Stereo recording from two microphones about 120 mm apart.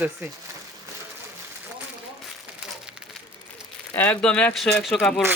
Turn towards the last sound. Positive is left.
turn(degrees=0)  # may be behind; listen again after turning